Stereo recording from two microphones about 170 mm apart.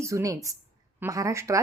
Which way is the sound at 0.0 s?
15° right (ahead or behind).